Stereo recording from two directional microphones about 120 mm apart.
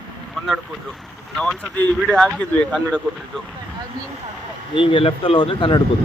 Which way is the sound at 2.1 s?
10° left (ahead or behind).